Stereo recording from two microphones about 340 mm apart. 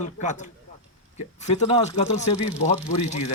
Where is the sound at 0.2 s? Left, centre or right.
Left.